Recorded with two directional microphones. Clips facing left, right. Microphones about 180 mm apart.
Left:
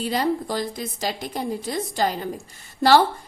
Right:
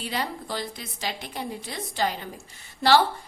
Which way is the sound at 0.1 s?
40° left (ahead or behind).